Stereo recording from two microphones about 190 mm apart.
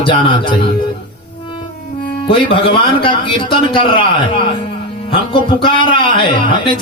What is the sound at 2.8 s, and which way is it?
Speech, 30° left (ahead or behind).